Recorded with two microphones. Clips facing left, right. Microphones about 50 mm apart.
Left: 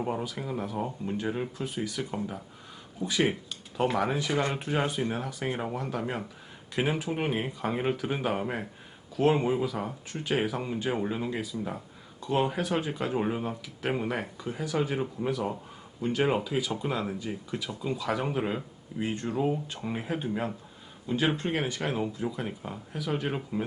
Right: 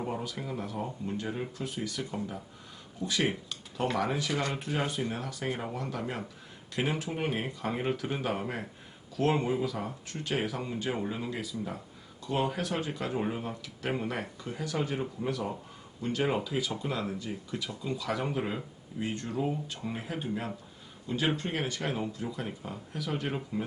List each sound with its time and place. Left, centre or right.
0.1 s speech: centre